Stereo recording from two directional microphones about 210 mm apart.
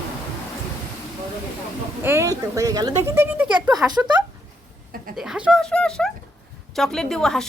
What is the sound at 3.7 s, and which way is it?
Speech, 20° right (ahead or behind).